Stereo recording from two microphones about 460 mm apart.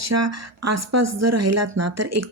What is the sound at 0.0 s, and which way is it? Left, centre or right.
Speech, right.